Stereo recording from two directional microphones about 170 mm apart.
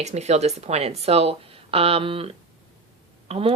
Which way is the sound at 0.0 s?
40° right (ahead or behind).